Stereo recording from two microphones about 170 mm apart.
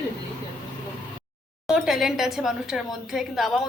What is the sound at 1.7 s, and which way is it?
A woman's voice, centre (ahead or behind).